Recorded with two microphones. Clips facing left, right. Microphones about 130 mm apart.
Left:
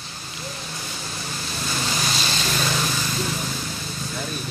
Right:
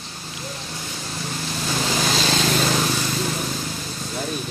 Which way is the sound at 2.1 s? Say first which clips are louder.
Right 6 dB; 90° right.